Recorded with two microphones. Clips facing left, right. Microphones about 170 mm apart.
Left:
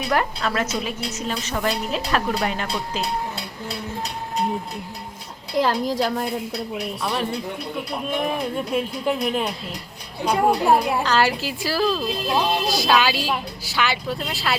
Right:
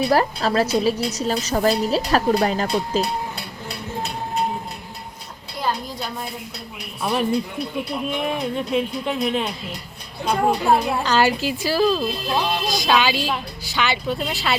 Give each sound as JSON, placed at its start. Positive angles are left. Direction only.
{"t": 0.1, "sound": "a woman's voice", "side_deg": -35}
{"t": 5.5, "sound": "a woman's voice", "side_deg": 90}
{"t": 7.0, "sound": "speech", "side_deg": -10}
{"t": 8.5, "sound": "a woman's voice", "side_deg": 5}